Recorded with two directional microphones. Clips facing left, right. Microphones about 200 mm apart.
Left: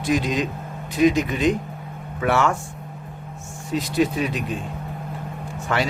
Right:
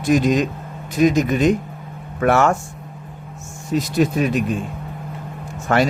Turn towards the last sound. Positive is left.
turn(degrees=-50)  # may be behind; listen again after turning